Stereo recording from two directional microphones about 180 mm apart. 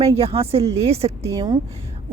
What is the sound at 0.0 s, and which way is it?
Speech, 35° right (ahead or behind).